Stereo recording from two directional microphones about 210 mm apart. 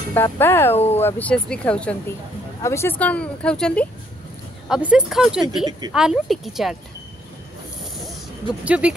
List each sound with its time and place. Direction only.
0.1 s speech: 10° left (ahead or behind)
0.7 s speech: 30° left (ahead or behind)
1.0 s speech: 5° left (ahead or behind)
8.6 s speech: 5° right (ahead or behind)